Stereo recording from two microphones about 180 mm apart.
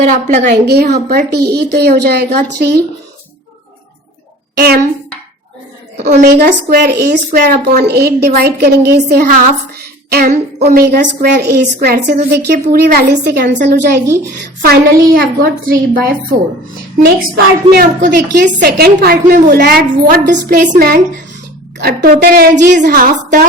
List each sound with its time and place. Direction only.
0.0 s a woman's voice: 40° right (ahead or behind)
0.6 s a woman's voice: 65° right (ahead or behind)
4.5 s a woman's voice: 60° right (ahead or behind)
6.2 s a woman's voice: 60° right (ahead or behind)
14.6 s a woman's voice: 55° right (ahead or behind)
22.5 s a woman's voice: 45° right (ahead or behind)